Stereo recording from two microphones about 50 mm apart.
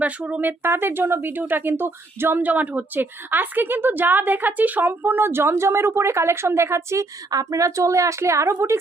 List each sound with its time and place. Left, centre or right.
0.0 s speech: right
0.6 s a woman's voice: right
2.4 s a woman's voice: right
7.5 s a woman's voice: right